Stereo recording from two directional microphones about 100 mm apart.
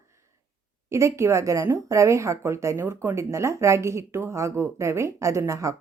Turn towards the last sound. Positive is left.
turn(degrees=-30)  # may be behind; listen again after turning